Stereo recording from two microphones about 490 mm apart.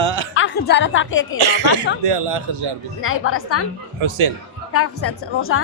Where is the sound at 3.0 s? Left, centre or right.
Left.